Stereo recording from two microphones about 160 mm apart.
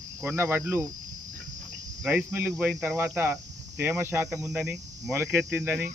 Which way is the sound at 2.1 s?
15° right (ahead or behind).